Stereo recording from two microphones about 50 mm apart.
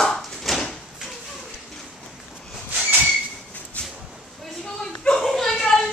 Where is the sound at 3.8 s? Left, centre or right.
Left.